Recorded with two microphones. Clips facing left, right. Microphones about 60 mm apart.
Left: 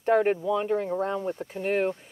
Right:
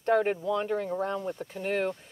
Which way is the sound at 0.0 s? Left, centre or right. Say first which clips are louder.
Left 3 dB; centre.